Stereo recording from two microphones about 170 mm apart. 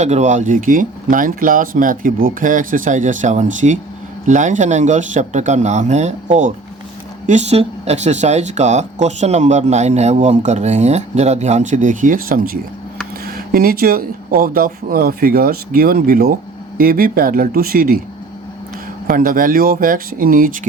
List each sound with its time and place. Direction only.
0.0 s speech: 45° right (ahead or behind)
19.0 s speech: 55° right (ahead or behind)